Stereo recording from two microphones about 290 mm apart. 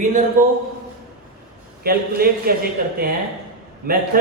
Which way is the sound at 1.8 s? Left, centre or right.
Right.